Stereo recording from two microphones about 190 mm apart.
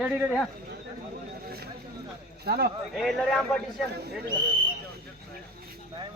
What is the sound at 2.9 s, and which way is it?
Speech, centre (ahead or behind).